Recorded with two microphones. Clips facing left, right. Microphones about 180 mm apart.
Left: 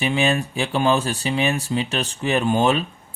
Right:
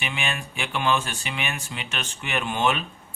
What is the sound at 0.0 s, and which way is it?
Speech, 35° left (ahead or behind).